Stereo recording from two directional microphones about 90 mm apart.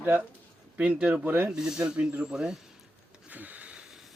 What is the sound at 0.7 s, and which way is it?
Speech, 10° right (ahead or behind).